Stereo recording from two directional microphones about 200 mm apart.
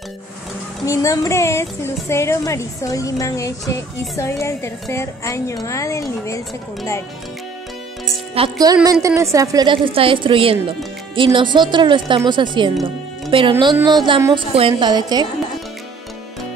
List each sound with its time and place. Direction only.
0.8 s a woman's voice: 15° left (ahead or behind)
8.4 s a woman's voice: 20° right (ahead or behind)